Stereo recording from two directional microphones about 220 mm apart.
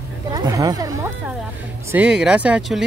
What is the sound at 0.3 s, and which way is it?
Speech, 15° right (ahead or behind).